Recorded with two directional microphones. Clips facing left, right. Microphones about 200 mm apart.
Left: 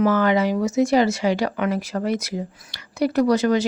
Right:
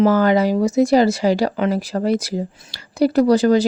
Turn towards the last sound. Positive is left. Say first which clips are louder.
# right 4 dB
turn(degrees=-35)  # may be behind; listen again after turning